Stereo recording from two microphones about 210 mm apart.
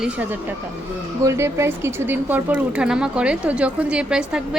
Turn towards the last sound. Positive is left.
turn(degrees=-5)  # may be behind; listen again after turning